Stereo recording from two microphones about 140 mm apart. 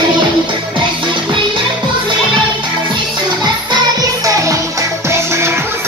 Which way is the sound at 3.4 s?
30° right (ahead or behind).